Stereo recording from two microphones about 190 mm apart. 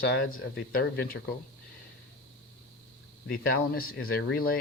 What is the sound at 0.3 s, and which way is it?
Speech, 50° left (ahead or behind).